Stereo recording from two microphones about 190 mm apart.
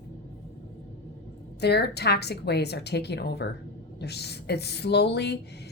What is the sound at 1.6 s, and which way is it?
A woman's voice, 60° left (ahead or behind).